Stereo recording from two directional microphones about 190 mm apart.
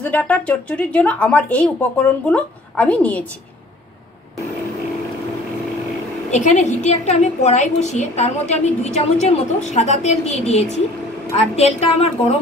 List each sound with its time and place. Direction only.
0.0 s speech: 5° left (ahead or behind)
6.3 s a woman's voice: 35° left (ahead or behind)